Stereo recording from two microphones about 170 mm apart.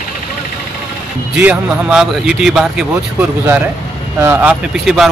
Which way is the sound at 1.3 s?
10° right (ahead or behind).